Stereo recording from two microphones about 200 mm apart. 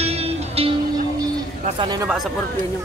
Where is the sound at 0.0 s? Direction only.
30° right (ahead or behind).